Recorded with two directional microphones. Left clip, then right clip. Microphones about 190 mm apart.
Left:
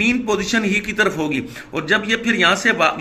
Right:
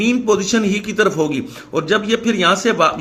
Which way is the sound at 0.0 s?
55° right (ahead or behind).